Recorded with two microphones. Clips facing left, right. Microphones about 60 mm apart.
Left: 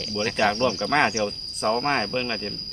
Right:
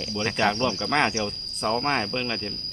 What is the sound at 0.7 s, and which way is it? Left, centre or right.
Speech, centre.